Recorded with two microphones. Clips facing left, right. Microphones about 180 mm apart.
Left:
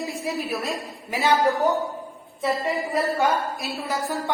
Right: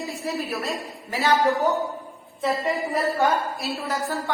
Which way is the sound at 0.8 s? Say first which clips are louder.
Left 1 dB; 15° left (ahead or behind).